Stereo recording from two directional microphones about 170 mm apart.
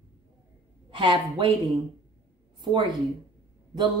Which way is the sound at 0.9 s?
30° right (ahead or behind).